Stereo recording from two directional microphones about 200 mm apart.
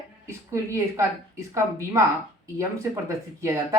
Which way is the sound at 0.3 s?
15° right (ahead or behind).